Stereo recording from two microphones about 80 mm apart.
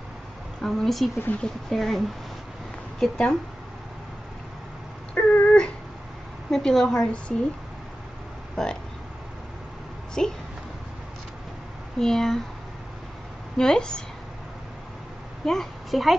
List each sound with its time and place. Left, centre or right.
0.6 s a woman's voice: centre
5.1 s a sound: left
6.5 s a woman's voice: centre
8.6 s speech: centre
10.2 s a woman's voice: centre
12.0 s speech: centre
13.6 s a woman's voice: centre
15.4 s a child's voice: centre